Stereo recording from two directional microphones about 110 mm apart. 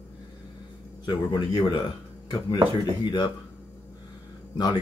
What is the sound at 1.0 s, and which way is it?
Speech, 45° left (ahead or behind).